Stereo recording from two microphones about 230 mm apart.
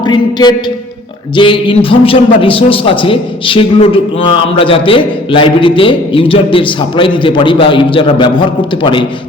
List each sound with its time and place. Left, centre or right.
0.0 s a man's voice: centre